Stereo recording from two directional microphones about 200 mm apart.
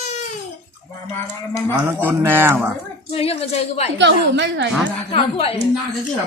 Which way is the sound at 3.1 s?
30° left (ahead or behind).